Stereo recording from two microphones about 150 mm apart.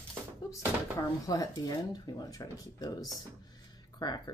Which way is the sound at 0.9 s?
20° left (ahead or behind).